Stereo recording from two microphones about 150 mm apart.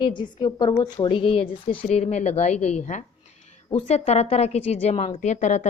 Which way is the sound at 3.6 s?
40° left (ahead or behind).